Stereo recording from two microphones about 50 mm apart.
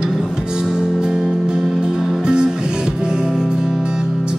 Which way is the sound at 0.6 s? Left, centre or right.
Centre.